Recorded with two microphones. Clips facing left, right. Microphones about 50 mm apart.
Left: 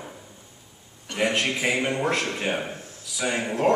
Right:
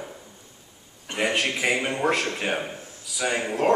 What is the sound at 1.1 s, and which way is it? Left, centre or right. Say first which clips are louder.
Speech: left 1 dB; right.